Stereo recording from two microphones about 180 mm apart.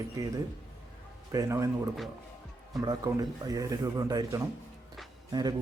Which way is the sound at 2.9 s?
20° right (ahead or behind).